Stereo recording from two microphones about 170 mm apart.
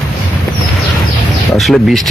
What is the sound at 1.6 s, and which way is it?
Speech, centre (ahead or behind).